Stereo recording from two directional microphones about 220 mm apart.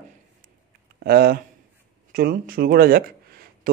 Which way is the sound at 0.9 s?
45° right (ahead or behind).